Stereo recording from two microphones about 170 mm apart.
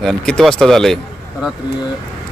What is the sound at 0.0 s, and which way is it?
Speech, centre (ahead or behind).